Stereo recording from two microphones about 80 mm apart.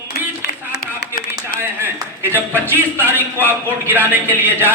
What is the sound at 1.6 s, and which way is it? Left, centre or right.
Clapping, right.